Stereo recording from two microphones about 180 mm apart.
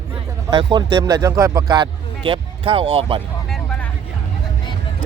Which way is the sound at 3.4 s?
5° left (ahead or behind).